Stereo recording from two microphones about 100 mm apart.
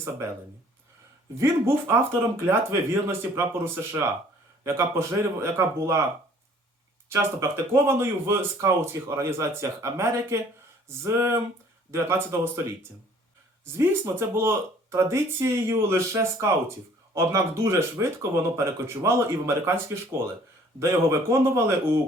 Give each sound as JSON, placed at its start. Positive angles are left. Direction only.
{"t": 1.4, "sound": "speech", "side_deg": -25}
{"t": 7.1, "sound": "speech", "side_deg": -30}
{"t": 14.2, "sound": "speech", "side_deg": -25}